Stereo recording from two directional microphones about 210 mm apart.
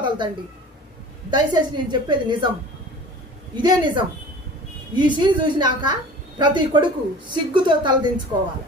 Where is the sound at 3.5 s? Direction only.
20° right (ahead or behind).